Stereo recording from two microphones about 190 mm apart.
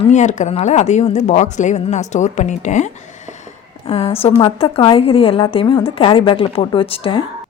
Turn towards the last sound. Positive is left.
turn(degrees=25)  # may be behind; listen again after turning